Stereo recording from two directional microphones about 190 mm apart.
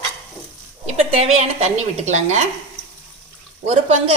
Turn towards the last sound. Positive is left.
turn(degrees=-35)  # may be behind; listen again after turning